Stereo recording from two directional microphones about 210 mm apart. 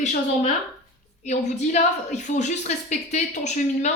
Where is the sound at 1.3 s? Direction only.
35° left (ahead or behind).